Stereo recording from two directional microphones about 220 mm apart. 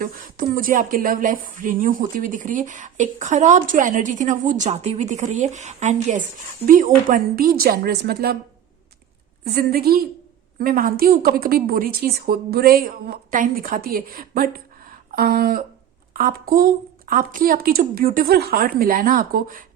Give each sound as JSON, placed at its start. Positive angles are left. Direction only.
{"t": 0.0, "sound": "speech", "side_deg": -40}
{"t": 9.4, "sound": "a woman's voice", "side_deg": -45}